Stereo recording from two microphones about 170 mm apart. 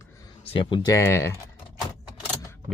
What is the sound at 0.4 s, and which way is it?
Speech, 30° left (ahead or behind).